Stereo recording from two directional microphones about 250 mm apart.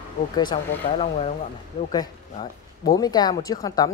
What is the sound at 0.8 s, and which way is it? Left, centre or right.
Speech, left.